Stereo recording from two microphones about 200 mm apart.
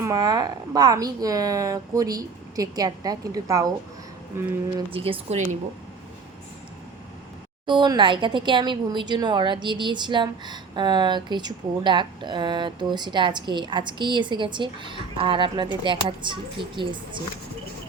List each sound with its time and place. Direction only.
0.0 s a woman's voice: 20° right (ahead or behind)
4.9 s speech: 30° right (ahead or behind)
7.7 s speech: 20° right (ahead or behind)